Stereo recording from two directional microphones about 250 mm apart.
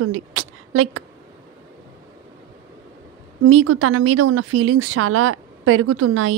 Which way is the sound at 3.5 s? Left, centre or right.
Right.